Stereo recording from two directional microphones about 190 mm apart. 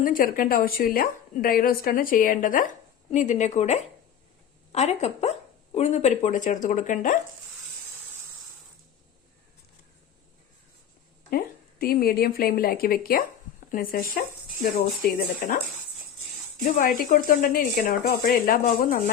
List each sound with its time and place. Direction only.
0.0 s a woman's voice: 45° left (ahead or behind)
11.3 s a woman's voice: 50° left (ahead or behind)
16.6 s a woman's voice: 45° left (ahead or behind)